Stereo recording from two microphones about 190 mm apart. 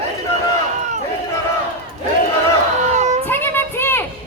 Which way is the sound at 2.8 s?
40° right (ahead or behind).